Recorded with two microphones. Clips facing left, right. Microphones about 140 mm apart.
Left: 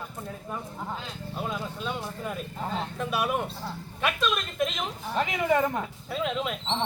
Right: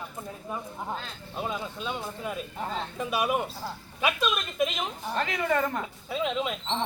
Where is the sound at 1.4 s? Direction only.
5° right (ahead or behind).